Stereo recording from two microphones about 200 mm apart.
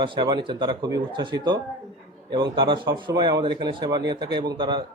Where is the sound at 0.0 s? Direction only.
20° right (ahead or behind).